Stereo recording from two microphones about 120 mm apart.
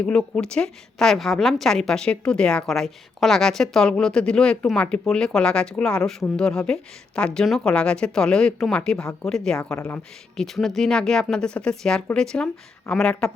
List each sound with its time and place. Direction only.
0.0 s a woman's voice: 10° left (ahead or behind)
9.7 s speech: 20° left (ahead or behind)
10.3 s a woman's voice: 5° left (ahead or behind)